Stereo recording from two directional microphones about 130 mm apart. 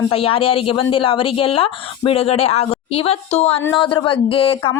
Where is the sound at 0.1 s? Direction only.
45° left (ahead or behind).